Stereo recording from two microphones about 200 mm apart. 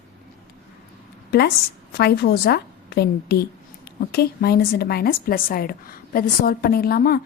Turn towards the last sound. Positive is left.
turn(degrees=50)  # may be behind; listen again after turning